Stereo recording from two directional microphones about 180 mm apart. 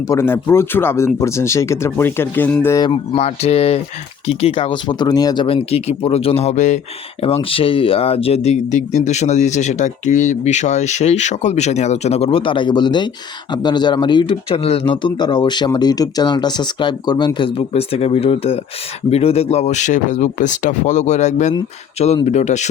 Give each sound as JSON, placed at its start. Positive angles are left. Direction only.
{"t": 0.1, "sound": "speech", "side_deg": 15}
{"t": 3.2, "sound": "speech", "side_deg": 35}